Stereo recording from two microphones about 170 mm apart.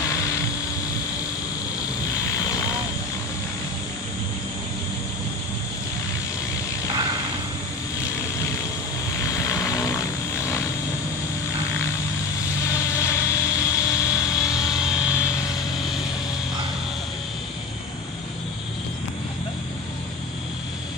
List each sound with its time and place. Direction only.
0.0 s a sound: 20° left (ahead or behind)
2.3 s vehicle: 20° left (ahead or behind)
8.1 s vehicle: 20° left (ahead or behind)
12.6 s vehicle: 15° left (ahead or behind)
14.7 s vehicle: 5° right (ahead or behind)